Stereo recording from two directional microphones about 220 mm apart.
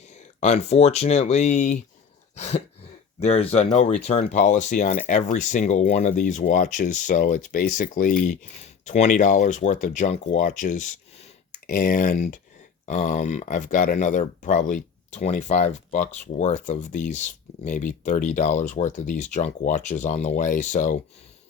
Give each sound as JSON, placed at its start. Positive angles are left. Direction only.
{"t": 0.3, "sound": "speech", "side_deg": 30}
{"t": 2.3, "sound": "throat clearing", "side_deg": 30}
{"t": 3.2, "sound": "speech", "side_deg": 30}